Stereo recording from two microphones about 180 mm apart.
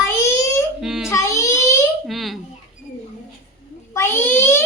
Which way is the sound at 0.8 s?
5° right (ahead or behind).